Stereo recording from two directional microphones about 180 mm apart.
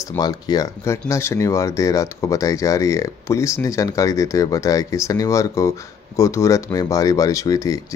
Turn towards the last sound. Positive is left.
turn(degrees=20)  # may be behind; listen again after turning